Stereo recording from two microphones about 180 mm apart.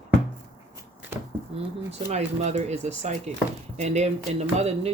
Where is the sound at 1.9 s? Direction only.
35° right (ahead or behind).